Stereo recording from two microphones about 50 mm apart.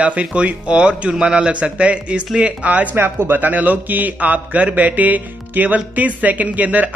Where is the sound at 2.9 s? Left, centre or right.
Right.